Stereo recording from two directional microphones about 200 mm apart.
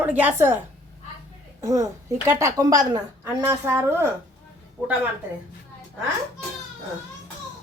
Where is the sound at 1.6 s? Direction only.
15° right (ahead or behind).